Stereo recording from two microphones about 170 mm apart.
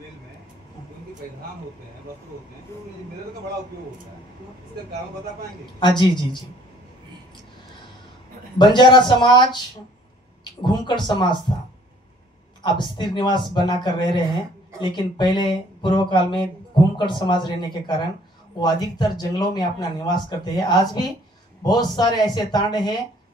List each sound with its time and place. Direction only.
5.8 s speech: 25° left (ahead or behind)
8.5 s speech: 25° left (ahead or behind)
12.6 s speech: 25° left (ahead or behind)